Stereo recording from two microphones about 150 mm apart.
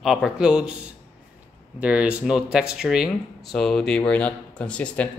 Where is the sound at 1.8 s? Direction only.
10° right (ahead or behind).